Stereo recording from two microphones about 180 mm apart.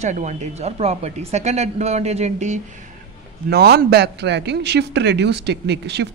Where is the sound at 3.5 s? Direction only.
65° right (ahead or behind).